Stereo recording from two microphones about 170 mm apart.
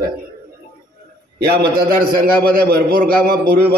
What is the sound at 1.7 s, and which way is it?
A man's voice, 60° right (ahead or behind).